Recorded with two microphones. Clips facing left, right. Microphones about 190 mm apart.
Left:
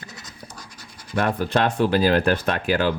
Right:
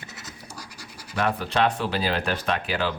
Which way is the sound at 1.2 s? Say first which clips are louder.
Left 2 dB; 45° left (ahead or behind).